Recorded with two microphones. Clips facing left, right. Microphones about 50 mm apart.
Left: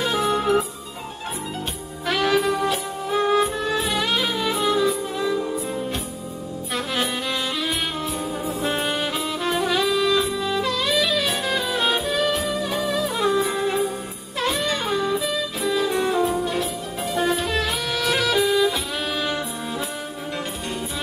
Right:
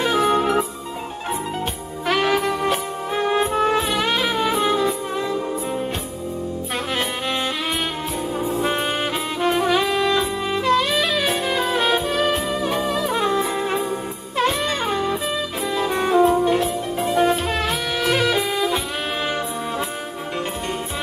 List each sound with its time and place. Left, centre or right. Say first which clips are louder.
0.0 s music: right 3 dB; right
2.0 s music: right 1 dB; right
3.6 s saxophone: right 4 dB; right
4.3 s music: right 3 dB; right
7.0 s music: even; right
8.5 s music: right 4 dB; right
8.8 s saxophone: right 1 dB; right
12.0 s saxophone: right 2 dB; right
12.5 s music: right 3 dB; right
13.1 s music: even; right
18.5 s saxophone: left 2 dB; right